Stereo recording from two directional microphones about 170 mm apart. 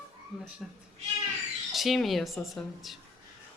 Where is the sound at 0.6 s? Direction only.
Centre (ahead or behind).